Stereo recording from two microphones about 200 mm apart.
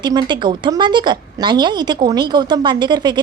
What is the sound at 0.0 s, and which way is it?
A woman's voice, 20° right (ahead or behind).